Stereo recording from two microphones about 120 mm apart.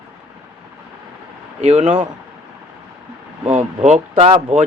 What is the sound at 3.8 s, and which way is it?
Speech, 70° right (ahead or behind).